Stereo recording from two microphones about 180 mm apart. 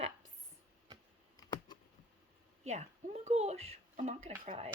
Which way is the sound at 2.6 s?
40° right (ahead or behind).